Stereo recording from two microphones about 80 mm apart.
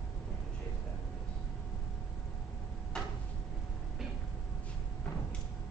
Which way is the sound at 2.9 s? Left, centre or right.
Centre.